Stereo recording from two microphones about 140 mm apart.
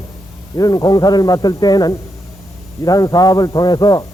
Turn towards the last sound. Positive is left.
turn(degrees=30)  # may be behind; listen again after turning